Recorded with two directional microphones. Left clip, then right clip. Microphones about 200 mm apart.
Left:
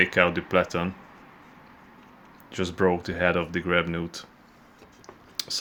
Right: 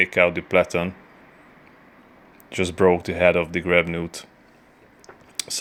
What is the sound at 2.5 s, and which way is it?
Speech, 15° right (ahead or behind).